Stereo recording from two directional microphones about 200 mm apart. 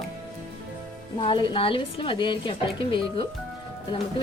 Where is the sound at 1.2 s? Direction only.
25° left (ahead or behind).